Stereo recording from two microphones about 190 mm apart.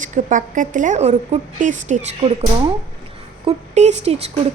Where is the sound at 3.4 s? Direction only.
35° right (ahead or behind).